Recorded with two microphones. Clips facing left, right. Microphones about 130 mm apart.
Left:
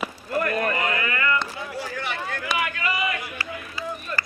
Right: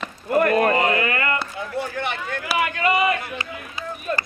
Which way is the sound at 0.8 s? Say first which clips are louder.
Right 6 dB; 30° right (ahead or behind).